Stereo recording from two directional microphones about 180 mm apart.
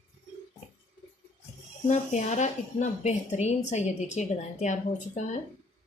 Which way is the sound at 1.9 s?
40° left (ahead or behind).